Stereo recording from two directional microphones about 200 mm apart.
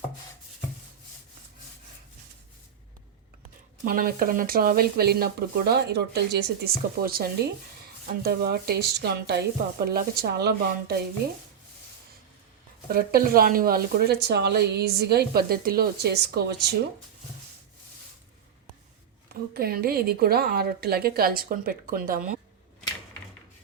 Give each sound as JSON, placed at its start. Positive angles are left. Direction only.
{"t": 3.8, "sound": "speech", "side_deg": -45}
{"t": 12.9, "sound": "speech", "side_deg": -50}
{"t": 19.3, "sound": "speech", "side_deg": -50}